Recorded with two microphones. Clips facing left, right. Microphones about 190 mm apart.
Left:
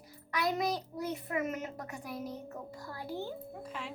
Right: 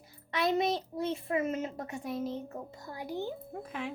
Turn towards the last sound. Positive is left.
turn(degrees=-55)  # may be behind; listen again after turning